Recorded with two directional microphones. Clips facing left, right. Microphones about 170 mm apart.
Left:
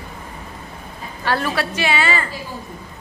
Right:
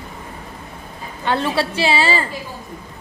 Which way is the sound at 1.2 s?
25° right (ahead or behind).